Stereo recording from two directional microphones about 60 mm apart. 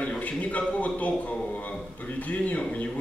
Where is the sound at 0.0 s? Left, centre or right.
Centre.